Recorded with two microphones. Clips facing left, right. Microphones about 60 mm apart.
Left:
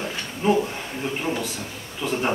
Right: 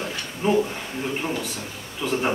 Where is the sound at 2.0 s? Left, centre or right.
Centre.